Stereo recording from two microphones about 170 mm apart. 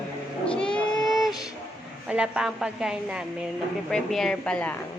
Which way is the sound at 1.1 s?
Centre (ahead or behind).